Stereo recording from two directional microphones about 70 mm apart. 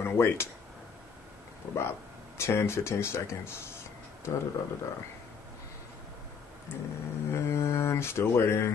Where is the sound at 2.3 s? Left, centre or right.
Left.